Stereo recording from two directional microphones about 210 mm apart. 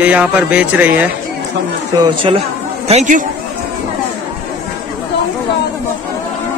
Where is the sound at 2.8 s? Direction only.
35° right (ahead or behind).